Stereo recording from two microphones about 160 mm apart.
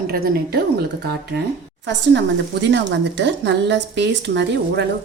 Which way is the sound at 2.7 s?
90° right.